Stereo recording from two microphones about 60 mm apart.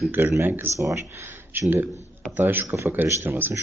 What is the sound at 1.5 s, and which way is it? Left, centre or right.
Speech, right.